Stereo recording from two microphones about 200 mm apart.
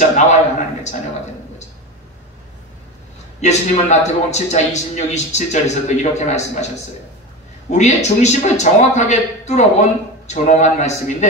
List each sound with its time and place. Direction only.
0.0 s a man's voice: 35° left (ahead or behind)
3.3 s a man's voice: 35° left (ahead or behind)
7.7 s a man's voice: 35° left (ahead or behind)